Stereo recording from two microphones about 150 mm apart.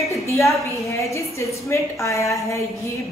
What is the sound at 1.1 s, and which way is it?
A woman's voice, 20° left (ahead or behind).